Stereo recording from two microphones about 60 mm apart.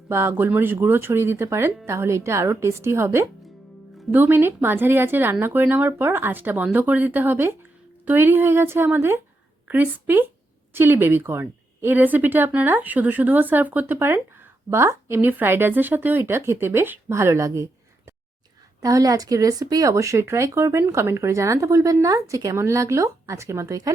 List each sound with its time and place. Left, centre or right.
0.1 s speech: right
9.6 s speech: right
14.7 s a woman's voice: right
15.3 s speech: right
18.8 s speech: right
22.0 s speech: right
22.5 s speech: right